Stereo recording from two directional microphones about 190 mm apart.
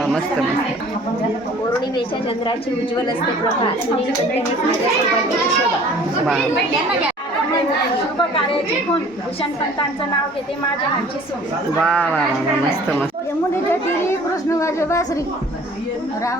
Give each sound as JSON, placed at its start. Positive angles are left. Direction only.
{"t": 11.8, "sound": "speech", "side_deg": 5}
{"t": 14.6, "sound": "speech", "side_deg": 15}